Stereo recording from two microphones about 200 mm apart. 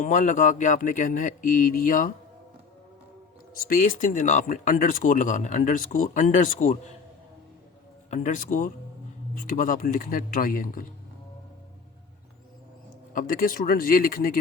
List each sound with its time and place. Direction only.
0.0 s speech: 40° left (ahead or behind)
3.5 s speech: 40° left (ahead or behind)
8.1 s speech: 40° left (ahead or behind)
13.1 s speech: 45° left (ahead or behind)